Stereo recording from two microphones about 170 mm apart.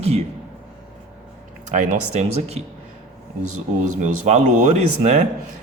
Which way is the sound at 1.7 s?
45° right (ahead or behind).